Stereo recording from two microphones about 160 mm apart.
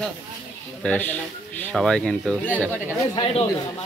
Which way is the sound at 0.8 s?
10° left (ahead or behind).